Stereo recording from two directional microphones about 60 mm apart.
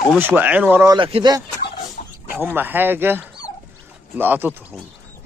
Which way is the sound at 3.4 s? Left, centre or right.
Left.